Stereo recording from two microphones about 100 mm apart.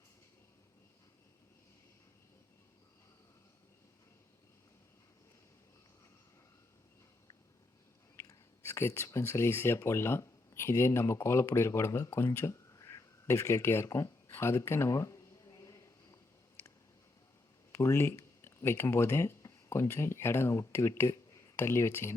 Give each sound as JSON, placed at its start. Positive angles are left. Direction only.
{"t": 8.1, "sound": "speech", "side_deg": 25}
{"t": 15.4, "sound": "a sound", "side_deg": 35}
{"t": 17.7, "sound": "speech", "side_deg": 25}